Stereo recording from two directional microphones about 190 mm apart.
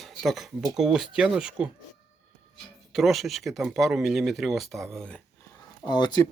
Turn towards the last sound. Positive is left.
turn(degrees=25)  # may be behind; listen again after turning